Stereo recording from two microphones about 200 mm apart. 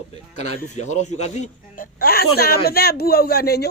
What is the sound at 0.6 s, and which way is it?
Speech, 35° left (ahead or behind).